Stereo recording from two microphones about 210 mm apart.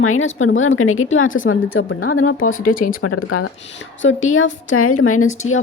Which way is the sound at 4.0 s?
65° left (ahead or behind).